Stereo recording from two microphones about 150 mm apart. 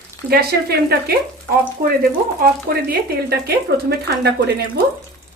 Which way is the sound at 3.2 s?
90° right.